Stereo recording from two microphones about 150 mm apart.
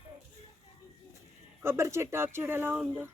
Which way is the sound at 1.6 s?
15° right (ahead or behind).